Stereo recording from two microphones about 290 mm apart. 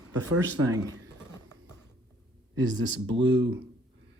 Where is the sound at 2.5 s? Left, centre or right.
Right.